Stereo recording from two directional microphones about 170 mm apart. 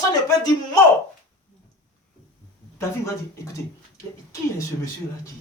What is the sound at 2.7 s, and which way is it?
Speech, 20° left (ahead or behind).